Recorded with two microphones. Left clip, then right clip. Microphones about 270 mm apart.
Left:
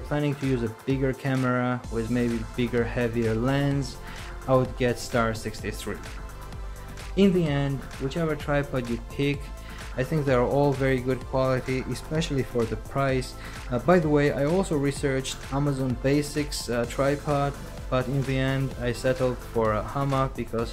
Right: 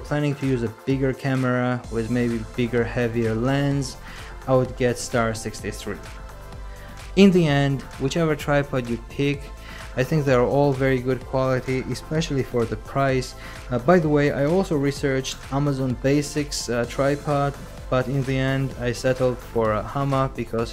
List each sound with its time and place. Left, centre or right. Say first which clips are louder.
0.4 s speech: right 3 dB; centre
7.2 s speech: right 6 dB; centre